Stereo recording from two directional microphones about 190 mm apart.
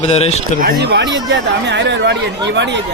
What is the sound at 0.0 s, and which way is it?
Speech, 35° left (ahead or behind).